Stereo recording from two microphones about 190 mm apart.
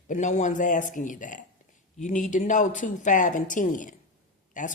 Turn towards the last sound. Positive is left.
turn(degrees=45)  # may be behind; listen again after turning